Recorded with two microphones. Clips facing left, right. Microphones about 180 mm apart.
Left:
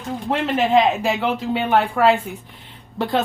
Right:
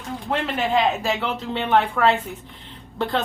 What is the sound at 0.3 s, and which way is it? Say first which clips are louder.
Speech: left 2 dB; 25° left (ahead or behind).